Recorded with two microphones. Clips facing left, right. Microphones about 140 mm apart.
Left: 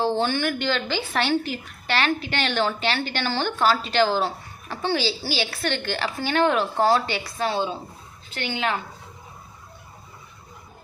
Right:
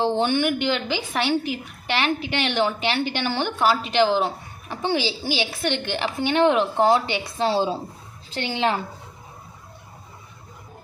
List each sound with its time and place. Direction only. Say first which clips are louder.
0.0 s a woman's voice: right 2 dB; 20° right (ahead or behind)